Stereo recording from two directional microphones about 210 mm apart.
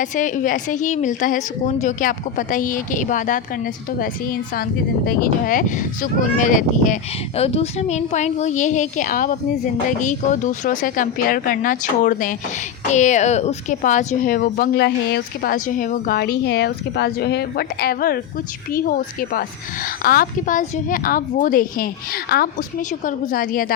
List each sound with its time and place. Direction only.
0.0 s speech: 35° left (ahead or behind)